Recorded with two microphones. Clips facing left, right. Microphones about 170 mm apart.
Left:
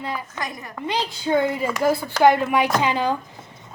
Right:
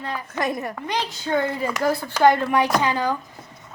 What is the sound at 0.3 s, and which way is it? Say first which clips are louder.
Speech: right 7 dB; 60° right (ahead or behind).